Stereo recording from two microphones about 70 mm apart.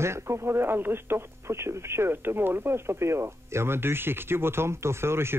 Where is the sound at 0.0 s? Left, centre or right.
Right.